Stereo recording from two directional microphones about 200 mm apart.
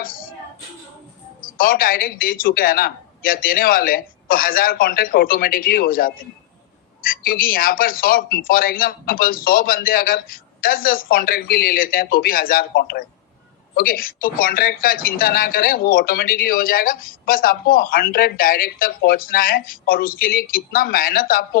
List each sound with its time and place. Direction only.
0.0 s music: 45° left (ahead or behind)
1.4 s speech: 45° left (ahead or behind)